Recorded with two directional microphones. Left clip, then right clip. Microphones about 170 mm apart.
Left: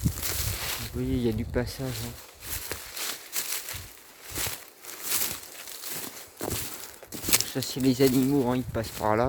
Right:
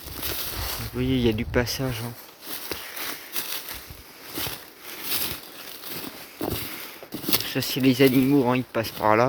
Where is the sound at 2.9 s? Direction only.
50° right (ahead or behind).